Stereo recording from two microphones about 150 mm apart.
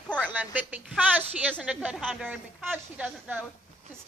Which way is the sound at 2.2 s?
10° right (ahead or behind).